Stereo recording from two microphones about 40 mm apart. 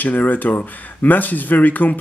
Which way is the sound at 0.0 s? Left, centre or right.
Left.